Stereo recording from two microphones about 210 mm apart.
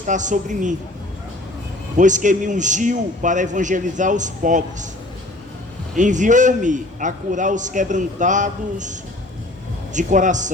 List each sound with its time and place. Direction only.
0.0 s a man's voice: 35° right (ahead or behind)
2.0 s a man's voice: 35° right (ahead or behind)
5.9 s a man's voice: 35° right (ahead or behind)